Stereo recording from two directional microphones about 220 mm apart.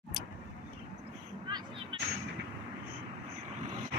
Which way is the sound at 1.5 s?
25° right (ahead or behind).